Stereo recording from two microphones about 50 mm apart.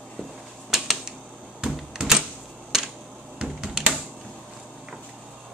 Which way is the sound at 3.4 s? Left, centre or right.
Centre.